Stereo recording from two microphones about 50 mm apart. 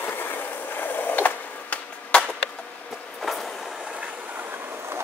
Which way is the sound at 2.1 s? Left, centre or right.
Left.